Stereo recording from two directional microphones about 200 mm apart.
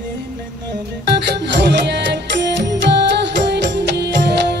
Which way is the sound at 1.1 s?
55° right (ahead or behind).